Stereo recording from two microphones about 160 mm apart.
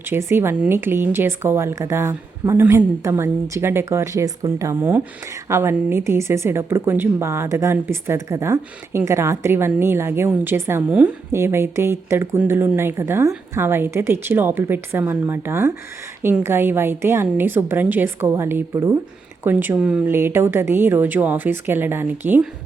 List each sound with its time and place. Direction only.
0.1 s a woman's voice: 15° right (ahead or behind)